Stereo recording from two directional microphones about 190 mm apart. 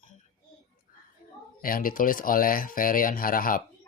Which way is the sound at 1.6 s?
50° left (ahead or behind).